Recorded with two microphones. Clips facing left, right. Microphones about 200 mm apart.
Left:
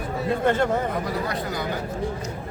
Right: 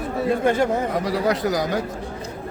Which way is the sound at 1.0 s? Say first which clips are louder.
Right 6 dB; 90° right.